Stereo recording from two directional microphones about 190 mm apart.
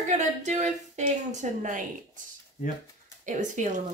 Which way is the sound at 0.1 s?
40° right (ahead or behind).